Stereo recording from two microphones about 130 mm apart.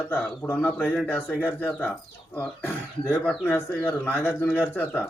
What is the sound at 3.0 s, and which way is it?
Speech, 10° left (ahead or behind).